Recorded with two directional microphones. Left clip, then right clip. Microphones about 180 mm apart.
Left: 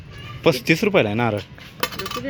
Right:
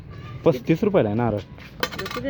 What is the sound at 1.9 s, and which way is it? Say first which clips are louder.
Cutlery: left 1 dB; 10° left (ahead or behind).